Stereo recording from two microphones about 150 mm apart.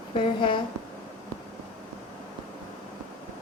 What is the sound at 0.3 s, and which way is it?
Speech, 30° left (ahead or behind).